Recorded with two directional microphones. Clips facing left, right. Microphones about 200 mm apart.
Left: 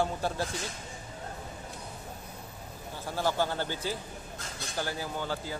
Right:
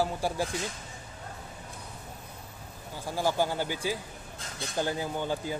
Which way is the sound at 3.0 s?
10° right (ahead or behind).